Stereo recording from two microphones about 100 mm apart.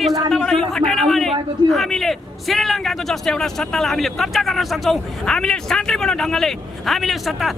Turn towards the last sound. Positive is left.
turn(degrees=0)  # may be behind; listen again after turning